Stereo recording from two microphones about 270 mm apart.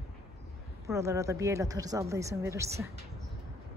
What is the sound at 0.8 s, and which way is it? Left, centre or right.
A woman's voice, centre.